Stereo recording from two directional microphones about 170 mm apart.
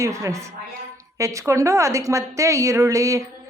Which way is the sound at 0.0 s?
15° right (ahead or behind).